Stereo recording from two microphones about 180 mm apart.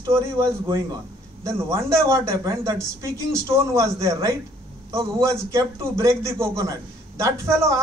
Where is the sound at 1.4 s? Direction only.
15° right (ahead or behind).